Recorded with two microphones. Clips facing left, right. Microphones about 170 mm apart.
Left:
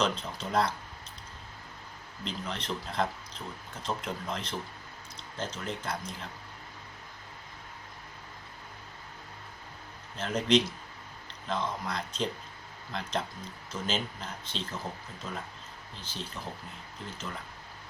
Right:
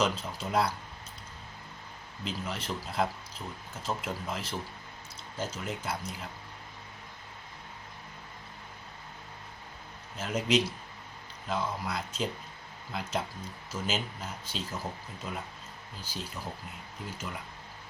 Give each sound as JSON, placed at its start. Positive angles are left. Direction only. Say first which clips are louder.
{"t": 0.0, "sound": "speech", "louder": "even", "side_deg": -5}
{"t": 2.2, "sound": "speech", "louder": "even", "side_deg": -5}
{"t": 10.2, "sound": "speech", "louder": "left 2 dB", "side_deg": -5}
{"t": 17.2, "sound": "speech", "louder": "even", "side_deg": -25}